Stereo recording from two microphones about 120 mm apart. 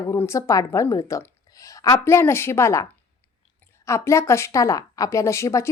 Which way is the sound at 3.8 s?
25° left (ahead or behind).